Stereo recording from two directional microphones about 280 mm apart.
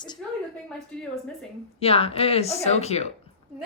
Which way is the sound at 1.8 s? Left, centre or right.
Left.